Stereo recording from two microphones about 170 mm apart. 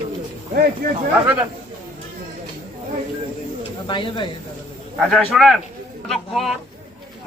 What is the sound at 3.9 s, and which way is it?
Speech, 30° left (ahead or behind).